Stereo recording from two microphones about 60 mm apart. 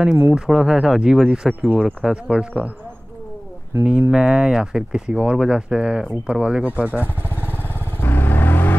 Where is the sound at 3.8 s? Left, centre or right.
Right.